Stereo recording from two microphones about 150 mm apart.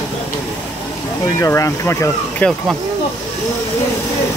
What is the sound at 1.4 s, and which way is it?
Speech, 20° left (ahead or behind).